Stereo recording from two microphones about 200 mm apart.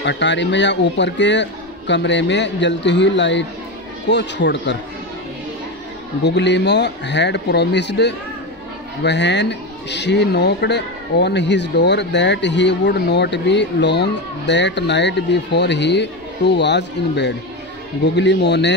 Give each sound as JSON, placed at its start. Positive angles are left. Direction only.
{"t": 0.0, "sound": "a man's voice", "side_deg": 60}
{"t": 6.2, "sound": "a man's voice", "side_deg": 60}